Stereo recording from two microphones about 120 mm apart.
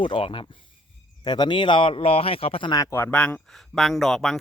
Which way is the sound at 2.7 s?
25° left (ahead or behind).